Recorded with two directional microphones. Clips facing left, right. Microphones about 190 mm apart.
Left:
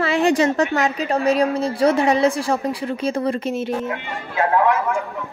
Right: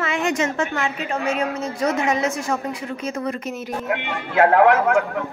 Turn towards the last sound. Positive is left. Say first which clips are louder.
# right 4 dB
turn(degrees=-75)  # may be behind; listen again after turning